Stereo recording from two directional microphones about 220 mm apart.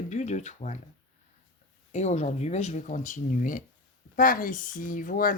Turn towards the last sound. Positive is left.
turn(degrees=40)  # may be behind; listen again after turning